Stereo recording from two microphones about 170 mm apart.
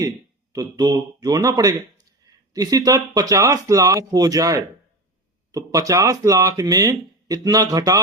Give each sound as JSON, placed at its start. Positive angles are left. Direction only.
{"t": 0.5, "sound": "speech", "side_deg": -20}